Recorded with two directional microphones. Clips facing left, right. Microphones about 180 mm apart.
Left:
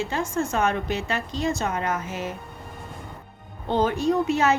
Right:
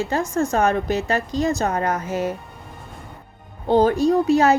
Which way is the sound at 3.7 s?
35° right (ahead or behind).